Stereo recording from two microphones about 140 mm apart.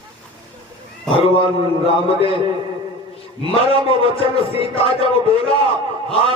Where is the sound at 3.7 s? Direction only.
40° left (ahead or behind).